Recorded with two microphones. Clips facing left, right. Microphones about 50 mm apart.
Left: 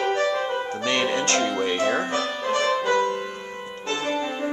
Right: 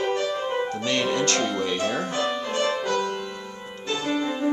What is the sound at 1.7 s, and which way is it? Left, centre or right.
Speech, left.